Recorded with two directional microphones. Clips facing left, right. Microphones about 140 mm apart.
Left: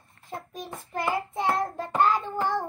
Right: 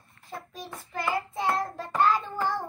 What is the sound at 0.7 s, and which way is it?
Child singing, 20° left (ahead or behind).